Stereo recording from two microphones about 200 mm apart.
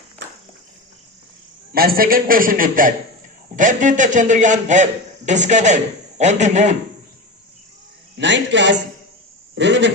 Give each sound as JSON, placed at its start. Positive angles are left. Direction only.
{"t": 1.7, "sound": "a man's voice", "side_deg": -50}
{"t": 8.1, "sound": "a man's voice", "side_deg": -65}